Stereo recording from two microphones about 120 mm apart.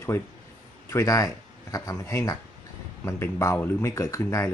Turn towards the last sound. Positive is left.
turn(degrees=25)  # may be behind; listen again after turning